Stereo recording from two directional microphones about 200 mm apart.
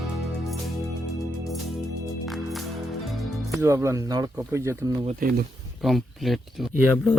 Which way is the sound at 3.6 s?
15° right (ahead or behind).